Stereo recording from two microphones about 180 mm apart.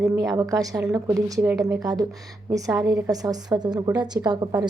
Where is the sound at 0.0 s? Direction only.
20° right (ahead or behind).